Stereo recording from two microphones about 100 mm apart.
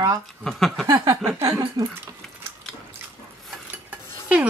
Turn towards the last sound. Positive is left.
turn(degrees=-15)  # may be behind; listen again after turning